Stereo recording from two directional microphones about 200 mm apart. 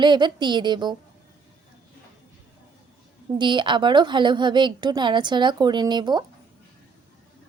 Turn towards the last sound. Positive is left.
turn(degrees=-20)  # may be behind; listen again after turning